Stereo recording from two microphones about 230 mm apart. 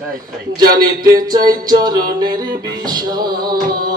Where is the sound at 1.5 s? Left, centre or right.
Centre.